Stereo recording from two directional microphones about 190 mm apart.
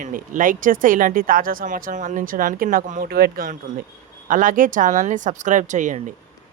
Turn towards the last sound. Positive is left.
turn(degrees=-40)  # may be behind; listen again after turning